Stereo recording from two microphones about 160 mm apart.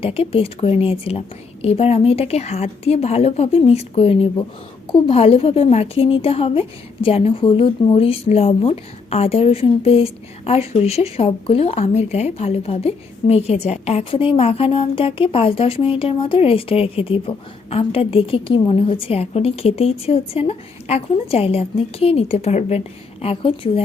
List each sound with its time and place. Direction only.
0.0 s a woman's voice: 35° left (ahead or behind)